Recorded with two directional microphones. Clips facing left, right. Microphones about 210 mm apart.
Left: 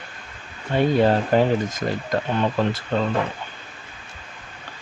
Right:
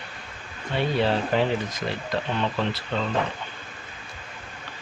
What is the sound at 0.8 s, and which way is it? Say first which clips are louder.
Speech: left 6 dB; 45° left (ahead or behind).